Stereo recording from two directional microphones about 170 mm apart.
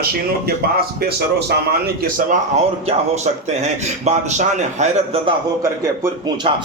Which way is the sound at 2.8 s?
40° right (ahead or behind).